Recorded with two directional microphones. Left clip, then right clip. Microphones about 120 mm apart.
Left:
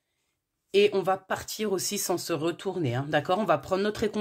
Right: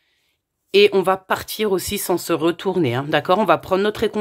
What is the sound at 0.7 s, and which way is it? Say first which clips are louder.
Speech: right 8 dB; 35° right (ahead or behind).